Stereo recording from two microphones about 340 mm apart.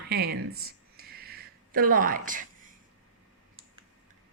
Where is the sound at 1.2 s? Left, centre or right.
Right.